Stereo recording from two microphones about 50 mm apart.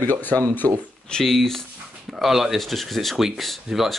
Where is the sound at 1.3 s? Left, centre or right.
Centre.